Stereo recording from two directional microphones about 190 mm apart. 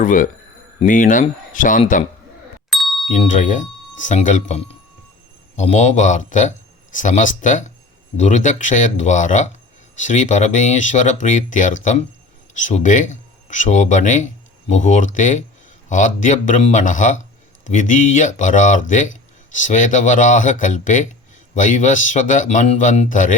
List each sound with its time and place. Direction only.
0.0 s speech: 45° left (ahead or behind)
2.6 s ding: centre (ahead or behind)
3.1 s speech: 40° left (ahead or behind)